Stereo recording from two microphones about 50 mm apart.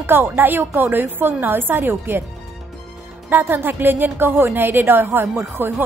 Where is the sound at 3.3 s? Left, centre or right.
Right.